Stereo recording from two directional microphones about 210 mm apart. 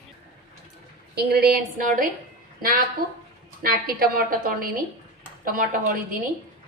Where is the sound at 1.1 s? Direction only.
50° right (ahead or behind).